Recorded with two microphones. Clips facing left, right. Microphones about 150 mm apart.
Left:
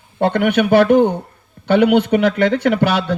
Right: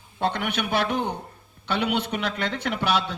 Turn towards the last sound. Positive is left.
turn(degrees=50)  # may be behind; listen again after turning